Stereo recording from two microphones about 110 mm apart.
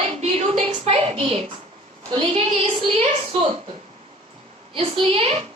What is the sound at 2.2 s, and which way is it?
A woman's voice, 65° right (ahead or behind).